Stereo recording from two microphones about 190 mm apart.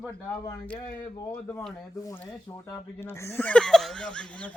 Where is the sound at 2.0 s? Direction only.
15° left (ahead or behind).